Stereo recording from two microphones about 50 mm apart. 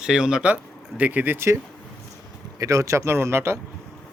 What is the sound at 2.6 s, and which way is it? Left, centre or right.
Speech, right.